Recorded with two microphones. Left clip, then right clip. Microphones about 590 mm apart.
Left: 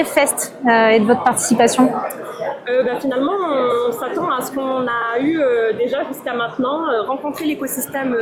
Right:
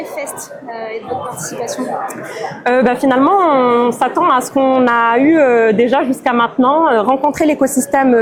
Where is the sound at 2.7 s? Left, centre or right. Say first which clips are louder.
Right 5 dB; right.